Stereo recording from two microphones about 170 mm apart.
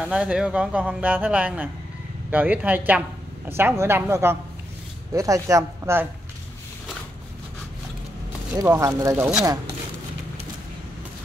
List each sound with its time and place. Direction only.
0.0 s a woman's voice: 5° right (ahead or behind)
8.5 s speech: 20° right (ahead or behind)